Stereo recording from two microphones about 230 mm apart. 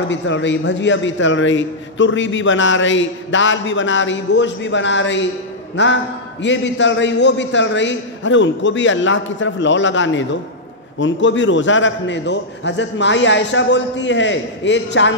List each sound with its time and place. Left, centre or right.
0.1 s a man's voice: left